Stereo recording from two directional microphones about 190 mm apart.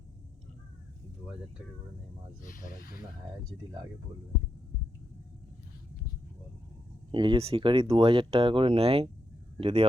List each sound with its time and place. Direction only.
2.4 s speech: 45° left (ahead or behind)
7.1 s speech: 25° right (ahead or behind)